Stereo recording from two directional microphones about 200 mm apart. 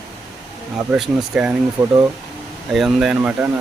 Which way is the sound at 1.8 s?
20° right (ahead or behind).